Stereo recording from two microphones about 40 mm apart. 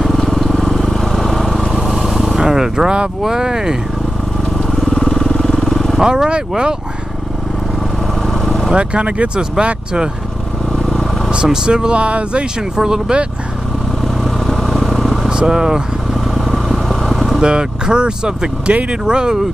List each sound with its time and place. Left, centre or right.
0.1 s vehicle: centre
3.2 s speech: centre
4.6 s vehicle: centre
4.8 s vehicle: centre
5.9 s speech: centre
8.3 s vehicle: centre
8.7 s speech: right
11.2 s speech: centre
12.7 s speech: centre
14.2 s vehicle: centre
15.2 s vehicle: centre
17.4 s speech: centre